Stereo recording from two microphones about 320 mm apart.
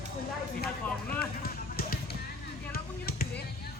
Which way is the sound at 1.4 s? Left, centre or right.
Left.